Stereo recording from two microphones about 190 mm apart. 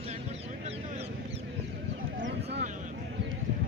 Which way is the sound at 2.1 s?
65° right (ahead or behind).